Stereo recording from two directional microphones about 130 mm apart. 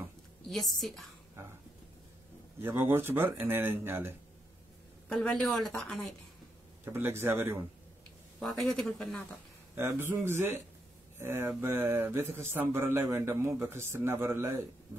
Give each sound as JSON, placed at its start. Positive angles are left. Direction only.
{"t": 0.5, "sound": "speech", "side_deg": 0}
{"t": 2.6, "sound": "speech", "side_deg": -15}
{"t": 5.0, "sound": "speech", "side_deg": 5}
{"t": 6.8, "sound": "speech", "side_deg": -15}
{"t": 8.4, "sound": "speech", "side_deg": 5}
{"t": 10.1, "sound": "speech", "side_deg": -20}